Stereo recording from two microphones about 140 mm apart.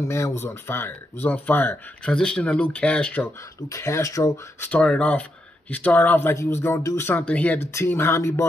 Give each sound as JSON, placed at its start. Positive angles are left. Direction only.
{"t": 0.0, "sound": "speech", "side_deg": 20}
{"t": 3.6, "sound": "speech", "side_deg": 20}
{"t": 4.6, "sound": "speech", "side_deg": 10}